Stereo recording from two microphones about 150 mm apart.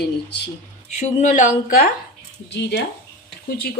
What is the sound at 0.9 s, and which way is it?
Speech, 55° left (ahead or behind).